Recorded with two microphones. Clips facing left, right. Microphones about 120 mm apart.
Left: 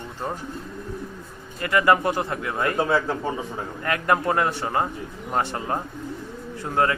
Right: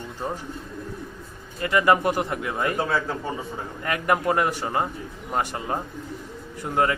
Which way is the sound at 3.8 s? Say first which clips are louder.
Even; 20° right (ahead or behind).